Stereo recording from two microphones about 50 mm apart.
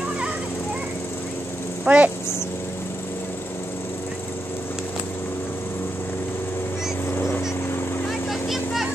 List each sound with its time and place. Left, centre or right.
1.9 s speech: right
7.2 s vehicle: left
8.3 s vehicle: centre